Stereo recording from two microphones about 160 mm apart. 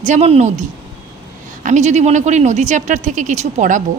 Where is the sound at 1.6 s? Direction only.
45° right (ahead or behind).